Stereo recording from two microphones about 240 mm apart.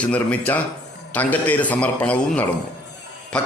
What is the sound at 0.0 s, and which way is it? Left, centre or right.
A man's voice, centre.